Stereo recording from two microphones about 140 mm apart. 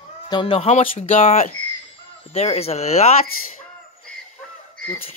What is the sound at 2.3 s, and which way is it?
Speech, 50° left (ahead or behind).